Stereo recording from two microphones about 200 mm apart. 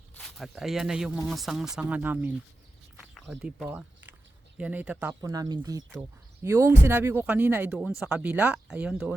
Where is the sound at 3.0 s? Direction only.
Centre (ahead or behind).